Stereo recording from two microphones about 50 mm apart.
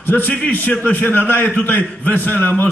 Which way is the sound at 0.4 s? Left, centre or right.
Left.